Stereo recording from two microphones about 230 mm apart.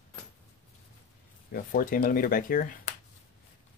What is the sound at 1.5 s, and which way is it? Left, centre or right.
Speech, left.